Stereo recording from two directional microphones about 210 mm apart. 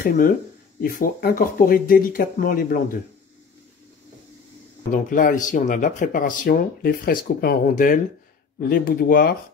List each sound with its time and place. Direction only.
0.0 s speech: 40° left (ahead or behind)
5.1 s speech: 40° left (ahead or behind)